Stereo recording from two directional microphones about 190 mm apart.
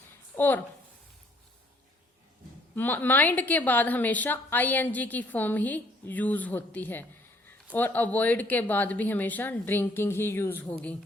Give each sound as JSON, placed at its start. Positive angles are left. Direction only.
{"t": 0.3, "sound": "a woman's voice", "side_deg": 10}
{"t": 2.7, "sound": "a woman's voice", "side_deg": 10}